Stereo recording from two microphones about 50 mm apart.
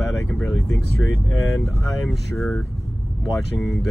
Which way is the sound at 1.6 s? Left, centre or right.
Left.